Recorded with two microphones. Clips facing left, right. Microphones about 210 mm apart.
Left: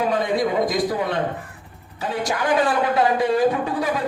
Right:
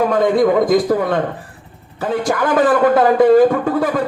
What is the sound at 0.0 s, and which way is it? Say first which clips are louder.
Speech: right 7 dB; 50° right (ahead or behind).